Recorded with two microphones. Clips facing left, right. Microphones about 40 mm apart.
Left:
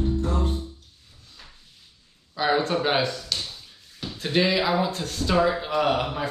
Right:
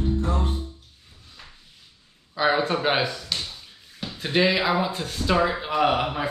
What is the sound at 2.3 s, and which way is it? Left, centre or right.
Speech, centre.